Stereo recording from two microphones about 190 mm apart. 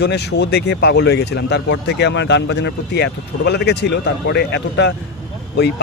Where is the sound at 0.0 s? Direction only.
65° left (ahead or behind).